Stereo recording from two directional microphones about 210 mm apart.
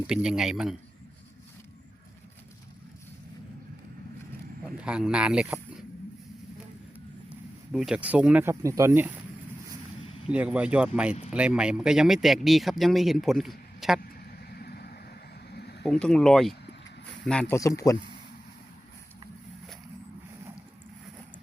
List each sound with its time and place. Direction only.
0.1 s speech: 5° right (ahead or behind)
4.8 s speech: 5° right (ahead or behind)
7.7 s speech: 5° right (ahead or behind)
10.2 s a man's voice: 5° right (ahead or behind)
14.3 s vehicle: 45° left (ahead or behind)
15.8 s speech: 5° left (ahead or behind)